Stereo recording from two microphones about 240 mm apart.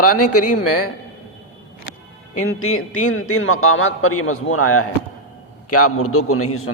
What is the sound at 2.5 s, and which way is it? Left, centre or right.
A man's voice, left.